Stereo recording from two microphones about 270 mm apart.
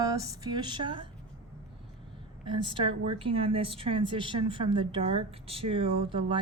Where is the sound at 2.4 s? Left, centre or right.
Centre.